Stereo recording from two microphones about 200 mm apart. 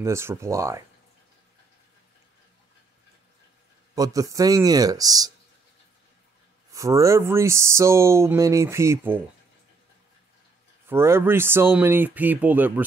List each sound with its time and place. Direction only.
0.0 s speech: 15° right (ahead or behind)
3.9 s speech: 15° right (ahead or behind)
6.7 s speech: 15° right (ahead or behind)
10.9 s speech: 10° right (ahead or behind)